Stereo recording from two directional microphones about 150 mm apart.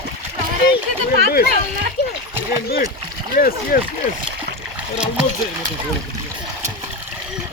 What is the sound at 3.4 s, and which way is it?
Speech, 80° left.